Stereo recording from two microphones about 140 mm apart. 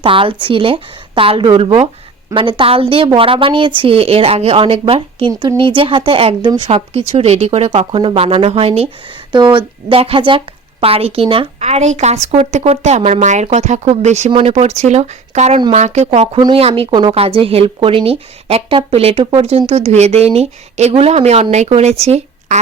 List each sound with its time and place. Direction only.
0.0 s speech: 40° right (ahead or behind)
5.3 s speech: 25° right (ahead or behind)
5.5 s speech: 40° right (ahead or behind)
9.3 s speech: 35° right (ahead or behind)
16.9 s speech: 30° right (ahead or behind)
17.2 s a woman's voice: 45° right (ahead or behind)